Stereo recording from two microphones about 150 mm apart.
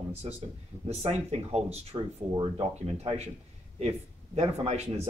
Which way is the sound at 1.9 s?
30° right (ahead or behind).